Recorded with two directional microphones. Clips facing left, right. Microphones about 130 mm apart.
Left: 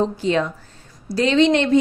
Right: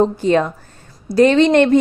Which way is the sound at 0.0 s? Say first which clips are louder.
Right 5 dB; 50° right (ahead or behind).